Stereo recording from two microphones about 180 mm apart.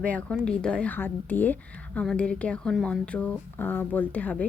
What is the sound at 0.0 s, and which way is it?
Speech, 5° left (ahead or behind).